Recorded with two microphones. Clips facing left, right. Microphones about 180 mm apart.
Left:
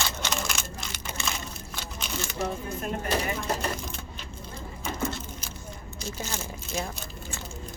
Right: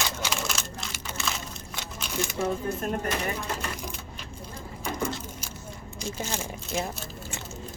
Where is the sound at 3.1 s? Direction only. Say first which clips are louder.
Left 2 dB; 40° left (ahead or behind).